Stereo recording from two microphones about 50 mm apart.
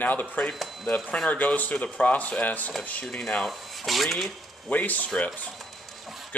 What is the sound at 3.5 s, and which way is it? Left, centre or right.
Speech, centre.